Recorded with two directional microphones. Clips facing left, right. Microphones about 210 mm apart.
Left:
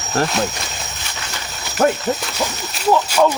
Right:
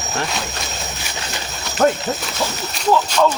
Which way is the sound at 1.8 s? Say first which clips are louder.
Even; 10° left (ahead or behind).